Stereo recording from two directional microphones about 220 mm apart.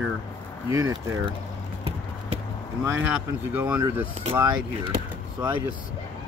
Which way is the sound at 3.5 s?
10° right (ahead or behind).